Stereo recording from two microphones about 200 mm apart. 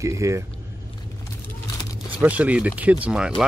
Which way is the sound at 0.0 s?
15° right (ahead or behind).